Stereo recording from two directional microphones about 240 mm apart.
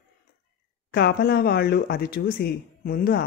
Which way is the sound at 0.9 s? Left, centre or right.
Left.